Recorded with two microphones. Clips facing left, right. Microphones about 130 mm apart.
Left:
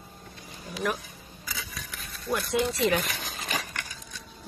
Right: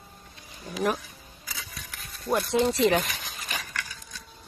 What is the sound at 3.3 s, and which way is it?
Dog, 35° left (ahead or behind).